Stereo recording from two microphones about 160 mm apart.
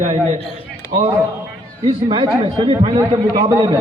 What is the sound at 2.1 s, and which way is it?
Speech, 35° right (ahead or behind).